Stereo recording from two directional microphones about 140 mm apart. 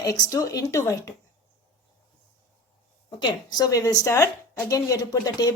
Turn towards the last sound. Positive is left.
turn(degrees=25)  # may be behind; listen again after turning